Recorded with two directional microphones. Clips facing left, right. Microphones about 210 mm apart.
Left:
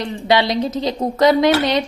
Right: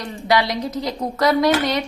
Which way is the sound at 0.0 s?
25° left (ahead or behind).